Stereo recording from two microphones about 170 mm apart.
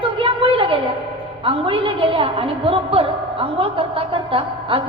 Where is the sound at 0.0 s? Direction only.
30° right (ahead or behind).